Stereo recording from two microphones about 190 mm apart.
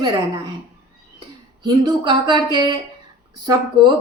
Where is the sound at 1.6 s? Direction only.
25° right (ahead or behind).